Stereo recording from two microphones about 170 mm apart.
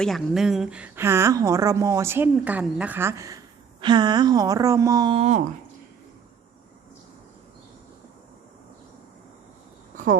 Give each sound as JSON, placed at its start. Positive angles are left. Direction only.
{"t": 0.0, "sound": "a woman's voice", "side_deg": 0}
{"t": 5.1, "sound": "speech", "side_deg": -40}